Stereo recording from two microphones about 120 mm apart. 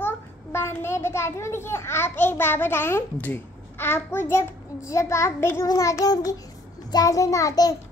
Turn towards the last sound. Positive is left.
turn(degrees=30)  # may be behind; listen again after turning